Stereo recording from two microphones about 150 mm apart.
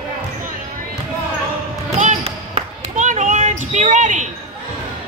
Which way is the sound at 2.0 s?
45° right (ahead or behind).